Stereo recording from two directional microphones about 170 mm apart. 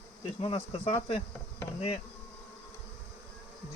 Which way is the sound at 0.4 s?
35° left (ahead or behind).